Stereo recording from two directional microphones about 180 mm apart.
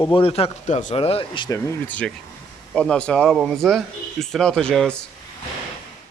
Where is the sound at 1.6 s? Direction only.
10° left (ahead or behind).